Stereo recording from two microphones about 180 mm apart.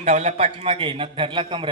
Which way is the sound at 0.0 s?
40° right (ahead or behind).